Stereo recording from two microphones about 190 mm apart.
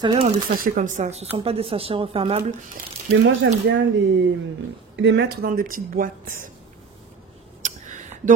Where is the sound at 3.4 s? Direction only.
65° right (ahead or behind).